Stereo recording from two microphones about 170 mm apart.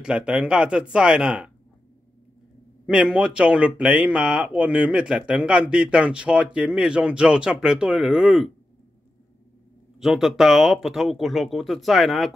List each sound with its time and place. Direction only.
0.0 s speech: 5° right (ahead or behind)
2.9 s speech: 5° right (ahead or behind)
9.9 s speech: centre (ahead or behind)